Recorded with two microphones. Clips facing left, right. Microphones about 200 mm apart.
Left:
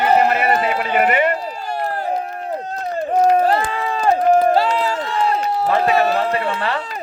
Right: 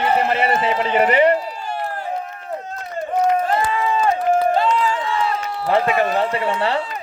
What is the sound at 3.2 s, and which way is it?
Run, 35° left (ahead or behind).